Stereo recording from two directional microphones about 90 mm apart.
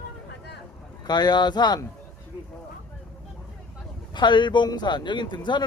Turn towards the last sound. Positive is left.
turn(degrees=60)  # may be behind; listen again after turning